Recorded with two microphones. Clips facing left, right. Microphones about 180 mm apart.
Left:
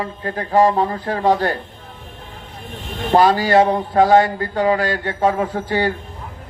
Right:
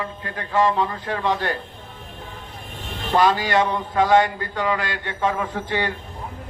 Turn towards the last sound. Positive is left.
turn(degrees=35)  # may be behind; listen again after turning